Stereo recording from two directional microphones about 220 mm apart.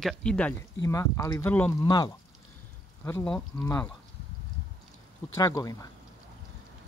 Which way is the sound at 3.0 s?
10° left (ahead or behind).